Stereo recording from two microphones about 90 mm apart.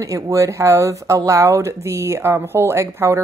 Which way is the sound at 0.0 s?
35° right (ahead or behind).